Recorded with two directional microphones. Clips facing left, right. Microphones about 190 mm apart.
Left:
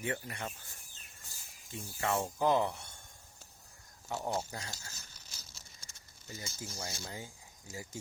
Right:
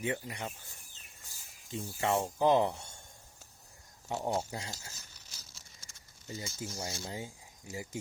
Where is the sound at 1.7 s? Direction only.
20° right (ahead or behind).